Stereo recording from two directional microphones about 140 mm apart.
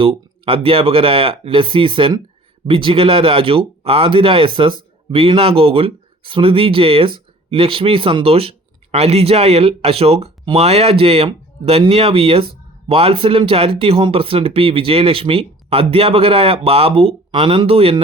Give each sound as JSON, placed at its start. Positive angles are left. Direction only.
{"t": 0.0, "sound": "a man's voice", "side_deg": -40}